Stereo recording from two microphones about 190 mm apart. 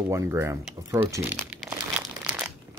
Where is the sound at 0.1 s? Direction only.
15° right (ahead or behind).